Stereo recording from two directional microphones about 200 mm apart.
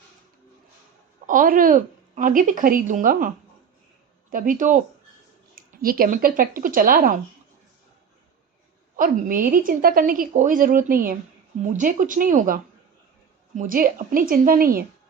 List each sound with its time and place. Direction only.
1.3 s a woman's voice: 45° right (ahead or behind)
9.0 s a woman's voice: 45° right (ahead or behind)
13.6 s a woman's voice: 45° right (ahead or behind)